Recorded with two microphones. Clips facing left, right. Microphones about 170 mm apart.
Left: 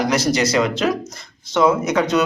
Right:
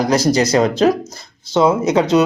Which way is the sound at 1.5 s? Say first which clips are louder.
Right 3 dB; 25° right (ahead or behind).